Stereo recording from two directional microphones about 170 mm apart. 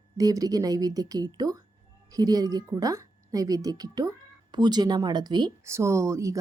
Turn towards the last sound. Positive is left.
turn(degrees=-20)  # may be behind; listen again after turning